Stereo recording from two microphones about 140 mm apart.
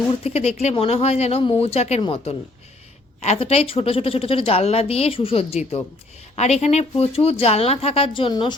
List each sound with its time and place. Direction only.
0.1 s a woman's voice: 50° left (ahead or behind)